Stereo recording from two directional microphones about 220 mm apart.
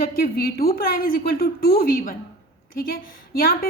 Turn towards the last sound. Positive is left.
turn(degrees=40)  # may be behind; listen again after turning